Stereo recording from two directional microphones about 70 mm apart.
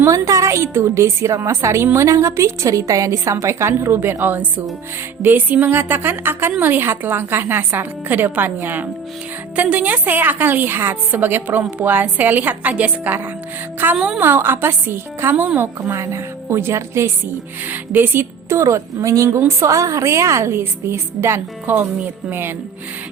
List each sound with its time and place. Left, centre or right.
0.0 s a woman's voice: right
13.9 s a woman's voice: centre
14.2 s a woman's voice: right
17.7 s a woman's voice: right
21.7 s a woman's voice: right